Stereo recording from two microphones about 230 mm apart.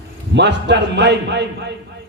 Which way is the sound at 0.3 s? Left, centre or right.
Right.